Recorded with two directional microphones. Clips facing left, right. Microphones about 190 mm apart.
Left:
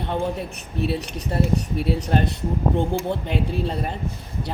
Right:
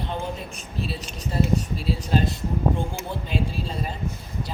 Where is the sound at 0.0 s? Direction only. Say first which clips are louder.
Left 5 dB; 60° left (ahead or behind).